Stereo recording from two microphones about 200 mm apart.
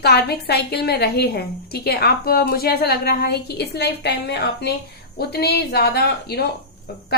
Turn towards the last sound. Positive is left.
turn(degrees=50)  # may be behind; listen again after turning